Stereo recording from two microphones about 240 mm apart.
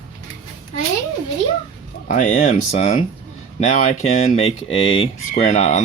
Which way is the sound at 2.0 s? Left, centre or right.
Left.